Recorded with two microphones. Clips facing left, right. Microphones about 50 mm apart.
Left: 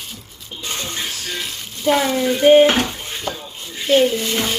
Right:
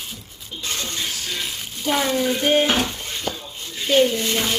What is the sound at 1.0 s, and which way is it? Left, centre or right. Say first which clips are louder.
Frying: left 1 dB; centre.